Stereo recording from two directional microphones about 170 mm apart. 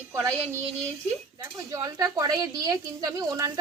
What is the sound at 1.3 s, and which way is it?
Speech, 20° right (ahead or behind).